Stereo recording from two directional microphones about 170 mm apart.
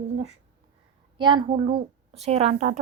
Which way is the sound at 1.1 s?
30° right (ahead or behind).